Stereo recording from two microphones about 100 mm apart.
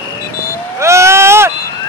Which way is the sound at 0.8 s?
30° right (ahead or behind).